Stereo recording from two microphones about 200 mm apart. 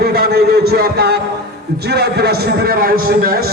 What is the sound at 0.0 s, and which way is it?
A man's voice, 50° right (ahead or behind).